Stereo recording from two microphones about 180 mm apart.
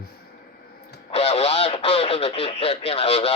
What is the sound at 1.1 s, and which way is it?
Speech, 35° left (ahead or behind).